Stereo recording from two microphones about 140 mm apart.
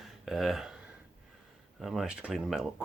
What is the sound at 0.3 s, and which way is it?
Speech, centre (ahead or behind).